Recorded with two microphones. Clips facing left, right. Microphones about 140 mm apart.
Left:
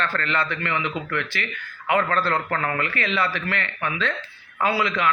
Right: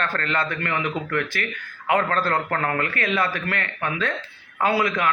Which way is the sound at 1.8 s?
45° right (ahead or behind).